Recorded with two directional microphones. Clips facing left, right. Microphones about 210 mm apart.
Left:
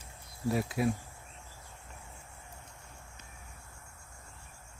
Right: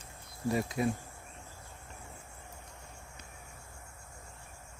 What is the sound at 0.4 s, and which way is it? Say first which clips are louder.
Speech: even; 5° left (ahead or behind).